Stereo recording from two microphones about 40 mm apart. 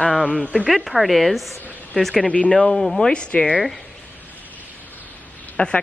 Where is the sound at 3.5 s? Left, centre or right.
Centre.